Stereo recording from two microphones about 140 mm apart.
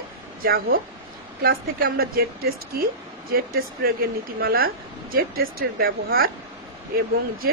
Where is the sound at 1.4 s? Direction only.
90° right.